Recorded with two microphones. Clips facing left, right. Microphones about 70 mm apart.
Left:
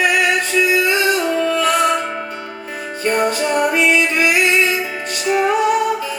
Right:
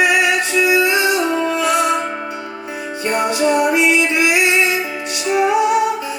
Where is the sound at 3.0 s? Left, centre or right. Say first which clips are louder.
Right 1 dB; left.